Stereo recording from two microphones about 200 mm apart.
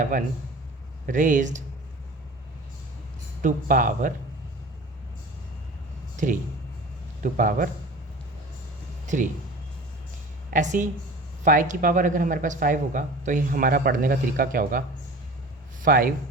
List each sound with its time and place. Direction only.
0.0 s speech: 40° right (ahead or behind)
3.4 s speech: 40° right (ahead or behind)
6.1 s speech: 40° right (ahead or behind)
9.0 s speech: 40° right (ahead or behind)
10.5 s speech: 40° right (ahead or behind)